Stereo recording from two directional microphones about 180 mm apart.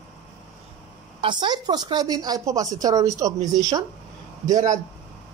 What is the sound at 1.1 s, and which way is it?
Speech, 25° right (ahead or behind).